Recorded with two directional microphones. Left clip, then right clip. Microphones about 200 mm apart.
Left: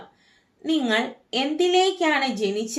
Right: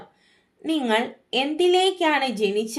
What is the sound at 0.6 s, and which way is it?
A woman's voice, 25° right (ahead or behind).